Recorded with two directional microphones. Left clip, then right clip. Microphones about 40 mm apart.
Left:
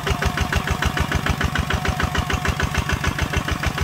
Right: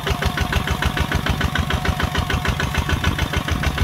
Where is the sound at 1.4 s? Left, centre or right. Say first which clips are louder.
Right 1 dB; right.